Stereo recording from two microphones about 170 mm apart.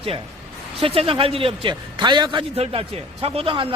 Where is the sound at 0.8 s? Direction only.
35° right (ahead or behind).